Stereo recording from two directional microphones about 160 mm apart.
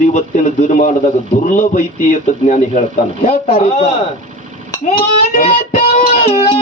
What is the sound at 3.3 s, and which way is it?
Speech, 40° left (ahead or behind).